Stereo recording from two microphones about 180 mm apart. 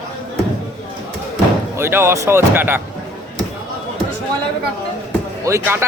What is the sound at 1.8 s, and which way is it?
Speech, 15° right (ahead or behind).